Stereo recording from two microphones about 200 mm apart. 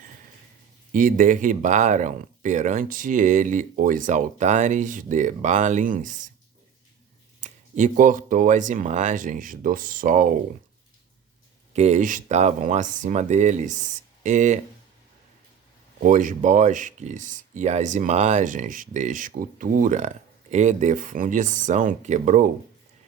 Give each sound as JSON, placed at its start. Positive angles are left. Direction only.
{"t": 0.9, "sound": "speech", "side_deg": -45}
{"t": 7.4, "sound": "speech", "side_deg": -40}
{"t": 11.7, "sound": "speech", "side_deg": -35}
{"t": 16.0, "sound": "speech", "side_deg": -40}